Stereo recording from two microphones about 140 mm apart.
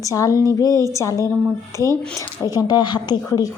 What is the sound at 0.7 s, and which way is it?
Speech, 25° right (ahead or behind).